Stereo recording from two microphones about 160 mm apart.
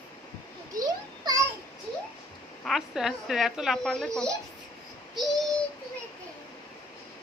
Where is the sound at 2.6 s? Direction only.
Centre (ahead or behind).